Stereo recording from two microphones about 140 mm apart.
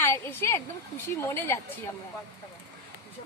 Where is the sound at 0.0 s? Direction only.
15° left (ahead or behind).